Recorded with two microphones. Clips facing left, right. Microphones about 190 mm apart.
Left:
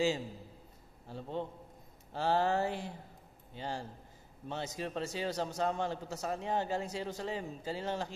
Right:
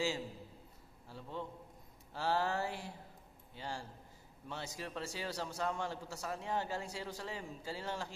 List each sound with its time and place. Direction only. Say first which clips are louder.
1.0 s a man's voice: left 6 dB; 25° left (ahead or behind)